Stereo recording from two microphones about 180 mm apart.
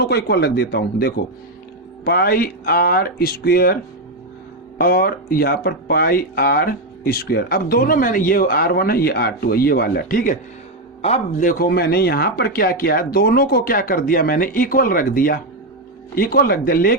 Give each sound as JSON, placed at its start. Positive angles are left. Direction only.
{"t": 0.0, "sound": "speech", "side_deg": 65}
{"t": 4.8, "sound": "speech", "side_deg": 55}
{"t": 11.0, "sound": "a man's voice", "side_deg": 35}
{"t": 11.4, "sound": "speech", "side_deg": 55}